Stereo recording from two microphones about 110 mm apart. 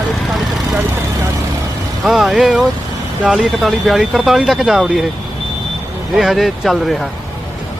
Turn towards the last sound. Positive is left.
turn(degrees=0)  # may be behind; listen again after turning